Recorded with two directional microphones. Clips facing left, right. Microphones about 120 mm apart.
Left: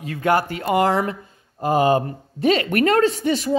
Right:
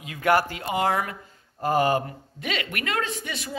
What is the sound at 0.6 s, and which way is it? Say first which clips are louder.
Speech: left 7 dB; 50° left (ahead or behind).